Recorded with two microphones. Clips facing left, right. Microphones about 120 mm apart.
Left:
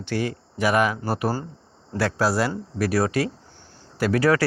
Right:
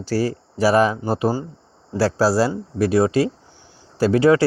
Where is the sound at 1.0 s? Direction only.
20° right (ahead or behind).